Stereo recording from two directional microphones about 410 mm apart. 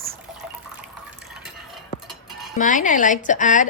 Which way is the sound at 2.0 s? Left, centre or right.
Centre.